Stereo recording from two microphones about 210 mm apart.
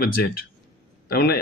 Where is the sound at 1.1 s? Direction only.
50° left (ahead or behind).